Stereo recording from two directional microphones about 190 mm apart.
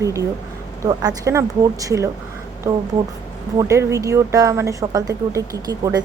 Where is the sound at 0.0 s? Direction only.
15° right (ahead or behind).